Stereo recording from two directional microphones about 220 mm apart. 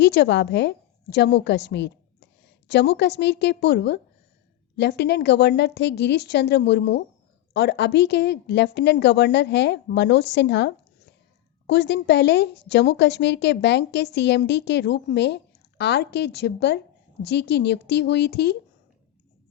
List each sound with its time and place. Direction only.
0.0 s a woman's voice: 50° left (ahead or behind)